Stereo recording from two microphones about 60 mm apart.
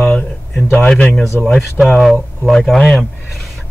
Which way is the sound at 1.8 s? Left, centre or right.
Centre.